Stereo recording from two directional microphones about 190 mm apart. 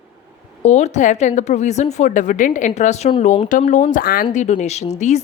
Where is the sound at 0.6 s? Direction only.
35° left (ahead or behind).